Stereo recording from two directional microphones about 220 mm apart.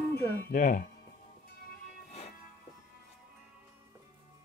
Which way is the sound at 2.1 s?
30° left (ahead or behind).